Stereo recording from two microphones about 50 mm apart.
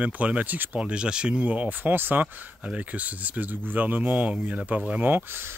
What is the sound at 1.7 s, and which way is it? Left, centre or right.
Speech, right.